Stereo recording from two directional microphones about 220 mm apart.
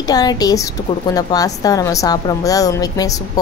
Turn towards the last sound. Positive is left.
turn(degrees=15)  # may be behind; listen again after turning